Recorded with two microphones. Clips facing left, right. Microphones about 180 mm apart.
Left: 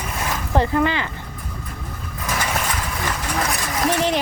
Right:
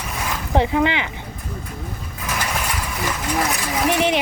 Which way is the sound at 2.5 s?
5° right (ahead or behind).